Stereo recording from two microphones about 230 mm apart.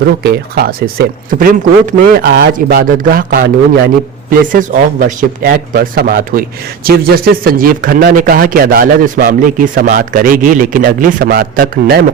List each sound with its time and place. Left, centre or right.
0.2 s a man's voice: right